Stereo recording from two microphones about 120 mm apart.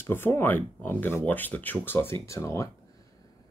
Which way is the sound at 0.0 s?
20° left (ahead or behind).